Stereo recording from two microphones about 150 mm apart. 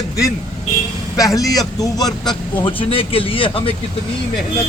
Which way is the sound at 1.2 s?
25° left (ahead or behind).